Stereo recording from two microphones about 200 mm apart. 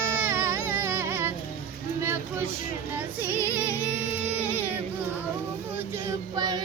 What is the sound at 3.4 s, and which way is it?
Music, 10° right (ahead or behind).